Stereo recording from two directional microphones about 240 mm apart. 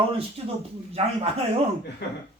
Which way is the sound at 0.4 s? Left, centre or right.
Right.